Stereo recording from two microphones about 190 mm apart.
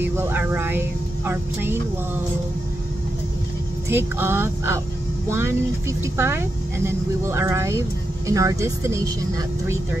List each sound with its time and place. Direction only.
0.1 s speech: 10° right (ahead or behind)
3.9 s speech: 10° right (ahead or behind)